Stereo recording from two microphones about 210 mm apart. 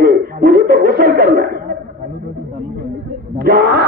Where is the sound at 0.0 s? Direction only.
45° right (ahead or behind).